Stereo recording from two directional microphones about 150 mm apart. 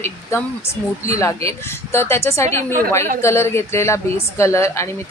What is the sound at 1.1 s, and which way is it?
Speech, 20° left (ahead or behind).